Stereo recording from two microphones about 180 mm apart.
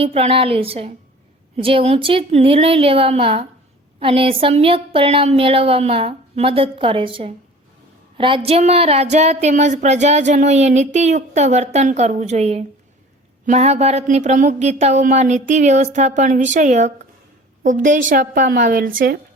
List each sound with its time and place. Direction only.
0.0 s speech: 35° right (ahead or behind)
8.4 s speech: 35° right (ahead or behind)
18.1 s speech: 50° right (ahead or behind)